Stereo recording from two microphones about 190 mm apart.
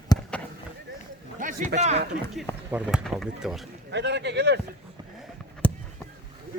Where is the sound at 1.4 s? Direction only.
45° right (ahead or behind).